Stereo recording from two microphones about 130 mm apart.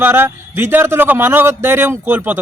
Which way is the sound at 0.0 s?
15° right (ahead or behind).